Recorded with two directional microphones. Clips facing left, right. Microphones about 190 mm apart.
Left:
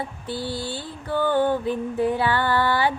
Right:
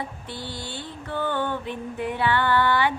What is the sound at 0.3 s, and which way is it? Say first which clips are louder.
Mantra: left 6 dB; 30° left (ahead or behind).